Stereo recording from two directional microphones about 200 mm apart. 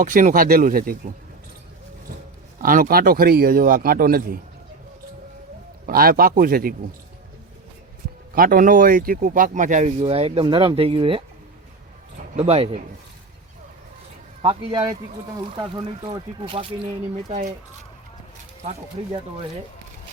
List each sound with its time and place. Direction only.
0.0 s speech: 40° right (ahead or behind)
2.6 s speech: 45° right (ahead or behind)
5.8 s speech: 45° right (ahead or behind)
8.4 s speech: 45° right (ahead or behind); by 11.2 s 30° right (ahead or behind)
12.4 s speech: 30° right (ahead or behind)
14.4 s speech: 25° right (ahead or behind)
18.6 s speech: 30° right (ahead or behind)